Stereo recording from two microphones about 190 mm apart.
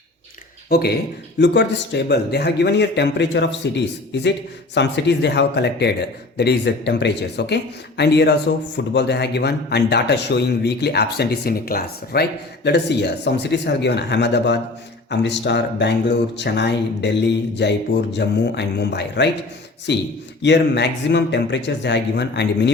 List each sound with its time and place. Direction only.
0.7 s speech: 55° left (ahead or behind)
4.7 s speech: 65° left (ahead or behind)